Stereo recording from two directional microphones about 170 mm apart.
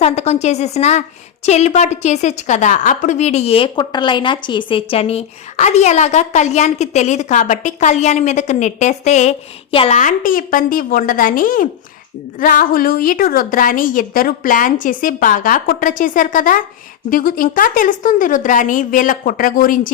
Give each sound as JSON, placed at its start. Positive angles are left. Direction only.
{"t": 0.0, "sound": "a woman's voice", "side_deg": 40}
{"t": 10.0, "sound": "a woman's voice", "side_deg": 50}